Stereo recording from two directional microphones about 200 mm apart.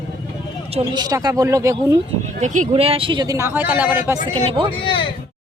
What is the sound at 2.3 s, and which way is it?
Speech, 40° right (ahead or behind).